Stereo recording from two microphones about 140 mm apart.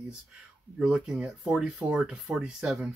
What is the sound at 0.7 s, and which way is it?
Speech, 5° right (ahead or behind).